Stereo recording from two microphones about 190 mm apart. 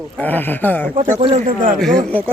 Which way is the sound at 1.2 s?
30° right (ahead or behind).